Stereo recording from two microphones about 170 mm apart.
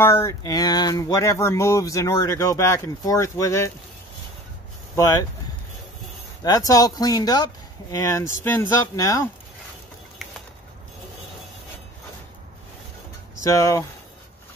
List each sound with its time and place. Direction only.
0.0 s speech: 15° left (ahead or behind)
4.9 s speech: 20° left (ahead or behind)
6.4 s speech: 20° left (ahead or behind)
13.4 s speech: 20° left (ahead or behind)